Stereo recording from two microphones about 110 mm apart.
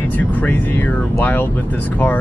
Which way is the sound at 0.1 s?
15° left (ahead or behind).